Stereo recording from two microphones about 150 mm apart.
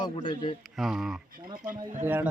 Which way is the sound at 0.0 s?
35° left (ahead or behind).